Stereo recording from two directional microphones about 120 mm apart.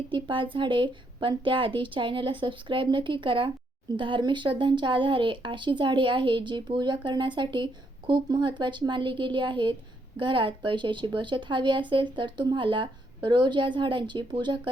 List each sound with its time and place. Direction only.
0.1 s a woman's voice: 45° right (ahead or behind)